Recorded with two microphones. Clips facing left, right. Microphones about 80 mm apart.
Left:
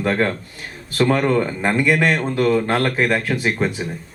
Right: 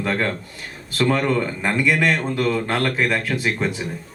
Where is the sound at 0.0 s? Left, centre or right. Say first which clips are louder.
Left 3 dB; left.